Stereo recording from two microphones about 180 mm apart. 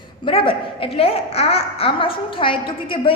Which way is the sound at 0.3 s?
30° left (ahead or behind).